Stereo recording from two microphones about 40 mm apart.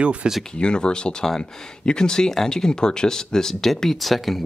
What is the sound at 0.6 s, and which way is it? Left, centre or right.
Speech, left.